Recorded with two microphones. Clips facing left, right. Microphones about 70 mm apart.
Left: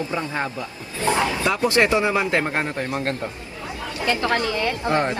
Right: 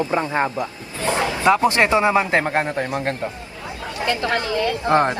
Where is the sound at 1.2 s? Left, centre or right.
Right.